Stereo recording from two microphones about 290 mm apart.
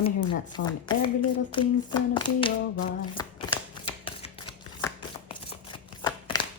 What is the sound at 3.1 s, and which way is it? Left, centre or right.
Shuffling cards, centre.